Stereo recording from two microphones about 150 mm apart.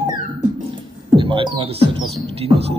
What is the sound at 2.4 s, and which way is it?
Speech, 40° right (ahead or behind).